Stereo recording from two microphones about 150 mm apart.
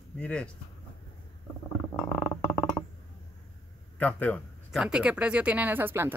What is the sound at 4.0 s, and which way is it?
Speech, 10° left (ahead or behind).